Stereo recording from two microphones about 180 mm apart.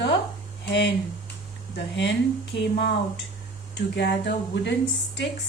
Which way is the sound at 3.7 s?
75° left (ahead or behind).